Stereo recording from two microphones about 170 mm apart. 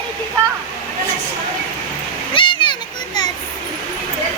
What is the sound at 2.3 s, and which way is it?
Splash, 30° left (ahead or behind).